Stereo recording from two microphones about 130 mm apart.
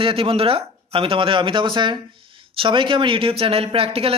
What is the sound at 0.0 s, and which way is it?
Speech, 45° right (ahead or behind).